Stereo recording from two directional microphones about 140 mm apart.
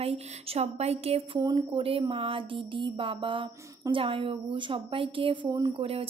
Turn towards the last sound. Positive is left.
turn(degrees=-30)  # may be behind; listen again after turning